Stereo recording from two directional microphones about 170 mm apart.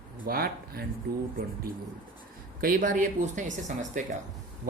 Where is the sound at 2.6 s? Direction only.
50° right (ahead or behind).